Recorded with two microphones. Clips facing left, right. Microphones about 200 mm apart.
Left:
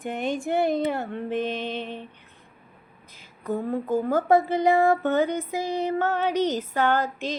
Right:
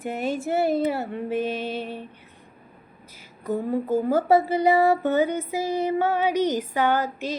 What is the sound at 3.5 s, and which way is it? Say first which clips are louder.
Speech: right 2 dB; 10° right (ahead or behind).